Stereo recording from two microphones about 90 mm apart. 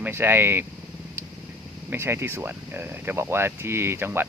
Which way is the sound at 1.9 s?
25° right (ahead or behind).